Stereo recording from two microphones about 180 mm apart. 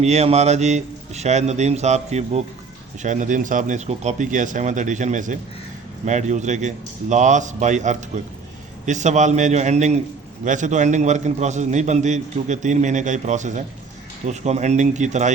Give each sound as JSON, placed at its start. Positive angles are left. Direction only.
{"t": 0.0, "sound": "a man's voice", "side_deg": -35}